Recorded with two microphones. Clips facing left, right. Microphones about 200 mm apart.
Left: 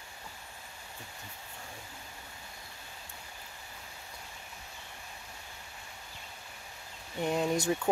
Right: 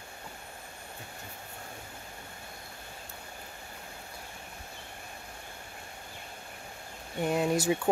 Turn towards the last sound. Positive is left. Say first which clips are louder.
# right 2 dB
turn(degrees=-5)  # may be behind; listen again after turning